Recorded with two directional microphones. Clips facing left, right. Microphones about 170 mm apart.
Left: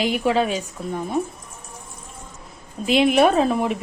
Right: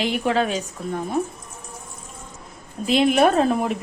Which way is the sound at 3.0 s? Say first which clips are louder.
Left 1 dB; centre (ahead or behind).